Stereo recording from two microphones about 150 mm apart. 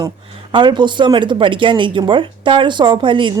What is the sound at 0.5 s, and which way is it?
Speech, 30° right (ahead or behind).